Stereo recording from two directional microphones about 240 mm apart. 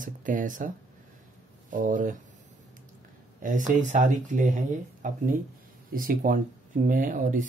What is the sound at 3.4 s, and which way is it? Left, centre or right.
Speech, right.